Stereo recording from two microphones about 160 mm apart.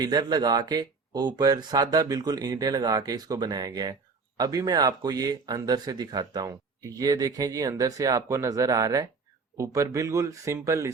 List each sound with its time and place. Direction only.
0.0 s speech: 25° right (ahead or behind)